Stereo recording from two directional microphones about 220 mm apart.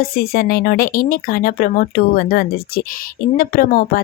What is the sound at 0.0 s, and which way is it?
Speech, 45° left (ahead or behind).